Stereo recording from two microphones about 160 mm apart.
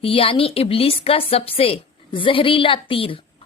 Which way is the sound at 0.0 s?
35° left (ahead or behind).